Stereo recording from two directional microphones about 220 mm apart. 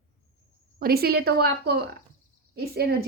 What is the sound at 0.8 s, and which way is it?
A woman's voice, 45° right (ahead or behind).